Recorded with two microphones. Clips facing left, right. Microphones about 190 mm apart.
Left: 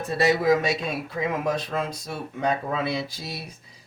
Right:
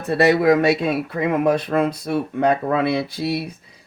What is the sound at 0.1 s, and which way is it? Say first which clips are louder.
Speech: right 6 dB; 60° right (ahead or behind).